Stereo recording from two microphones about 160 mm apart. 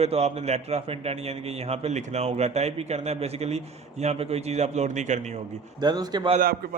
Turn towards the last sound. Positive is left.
turn(degrees=-65)  # may be behind; listen again after turning